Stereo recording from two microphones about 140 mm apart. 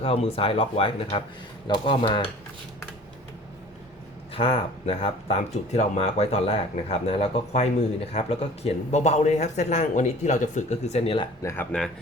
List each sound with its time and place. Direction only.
0.0 s speech: 45° left (ahead or behind)
4.4 s speech: 40° left (ahead or behind)
11.7 s speech: 5° left (ahead or behind)